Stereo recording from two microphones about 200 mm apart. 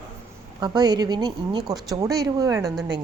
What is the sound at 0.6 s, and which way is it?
A woman's voice, 20° right (ahead or behind).